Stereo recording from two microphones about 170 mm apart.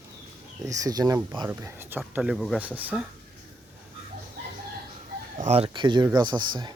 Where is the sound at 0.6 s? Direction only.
20° right (ahead or behind).